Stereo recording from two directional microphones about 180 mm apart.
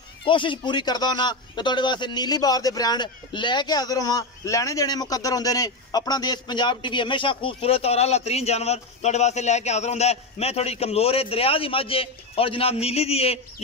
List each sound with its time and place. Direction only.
0.2 s a man's voice: 25° left (ahead or behind)